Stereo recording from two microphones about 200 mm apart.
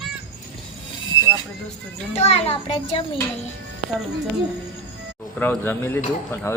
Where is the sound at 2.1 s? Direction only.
30° left (ahead or behind).